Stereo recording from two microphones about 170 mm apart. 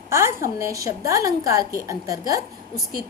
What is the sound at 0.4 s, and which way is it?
A woman's voice, 20° right (ahead or behind).